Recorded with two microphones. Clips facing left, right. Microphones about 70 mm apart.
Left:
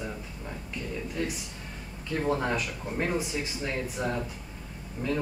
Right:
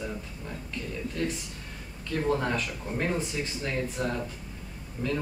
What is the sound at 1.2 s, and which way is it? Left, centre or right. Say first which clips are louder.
Speech: right 2 dB; centre.